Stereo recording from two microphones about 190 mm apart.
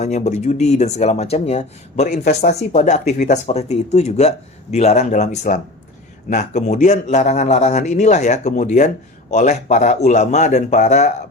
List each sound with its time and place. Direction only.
0.0 s speech: 35° left (ahead or behind)